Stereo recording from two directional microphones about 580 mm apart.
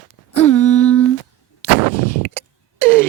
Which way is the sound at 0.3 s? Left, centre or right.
Left.